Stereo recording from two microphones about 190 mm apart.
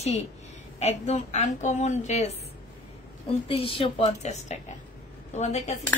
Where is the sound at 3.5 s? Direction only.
30° left (ahead or behind).